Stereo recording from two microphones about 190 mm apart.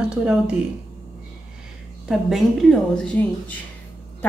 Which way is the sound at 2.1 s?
Centre (ahead or behind).